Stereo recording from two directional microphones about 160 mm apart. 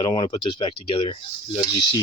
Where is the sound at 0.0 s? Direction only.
25° left (ahead or behind).